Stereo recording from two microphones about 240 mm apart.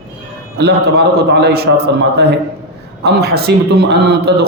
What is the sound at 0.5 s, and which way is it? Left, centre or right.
A man's voice, right.